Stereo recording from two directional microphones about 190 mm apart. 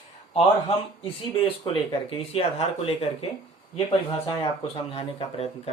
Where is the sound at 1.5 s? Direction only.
30° left (ahead or behind).